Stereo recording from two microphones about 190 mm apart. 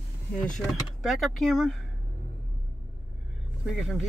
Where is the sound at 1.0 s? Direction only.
Centre (ahead or behind).